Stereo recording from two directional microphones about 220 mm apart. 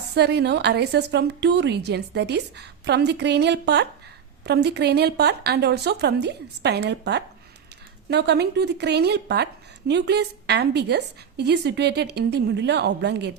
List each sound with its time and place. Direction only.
0.1 s a woman's voice: 50° right (ahead or behind)